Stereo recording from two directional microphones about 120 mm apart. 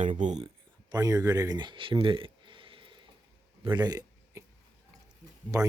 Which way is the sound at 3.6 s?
35° right (ahead or behind).